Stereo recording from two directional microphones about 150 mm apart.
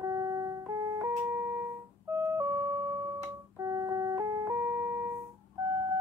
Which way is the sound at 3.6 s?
20° right (ahead or behind).